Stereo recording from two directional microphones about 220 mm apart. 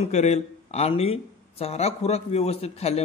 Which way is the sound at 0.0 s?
30° left (ahead or behind).